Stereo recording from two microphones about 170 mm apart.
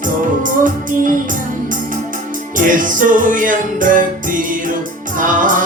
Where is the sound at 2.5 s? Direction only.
50° right (ahead or behind).